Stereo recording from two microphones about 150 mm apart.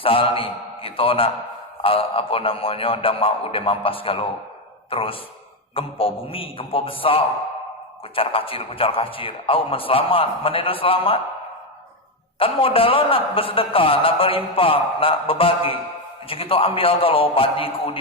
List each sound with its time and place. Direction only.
0.0 s a man's voice: 40° left (ahead or behind)
12.4 s a man's voice: 40° left (ahead or behind)